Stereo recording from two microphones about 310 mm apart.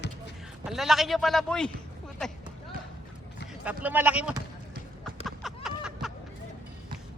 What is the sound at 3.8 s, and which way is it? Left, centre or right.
Speech, centre.